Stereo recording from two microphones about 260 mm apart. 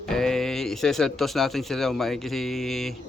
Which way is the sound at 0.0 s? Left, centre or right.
Centre.